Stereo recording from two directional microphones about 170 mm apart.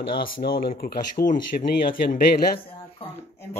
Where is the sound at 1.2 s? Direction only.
35° left (ahead or behind).